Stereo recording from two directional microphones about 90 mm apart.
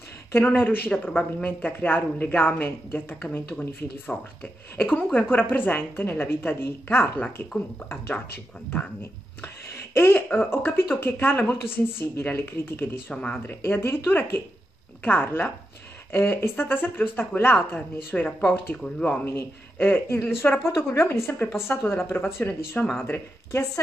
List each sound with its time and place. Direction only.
0.3 s a woman's voice: 25° left (ahead or behind)
4.1 s a woman's voice: 10° left (ahead or behind)
9.9 s a woman's voice: 25° left (ahead or behind)
13.1 s speech: 10° left (ahead or behind)
13.6 s a woman's voice: 30° left (ahead or behind)
18.8 s speech: 15° left (ahead or behind)
19.2 s a woman's voice: 25° left (ahead or behind)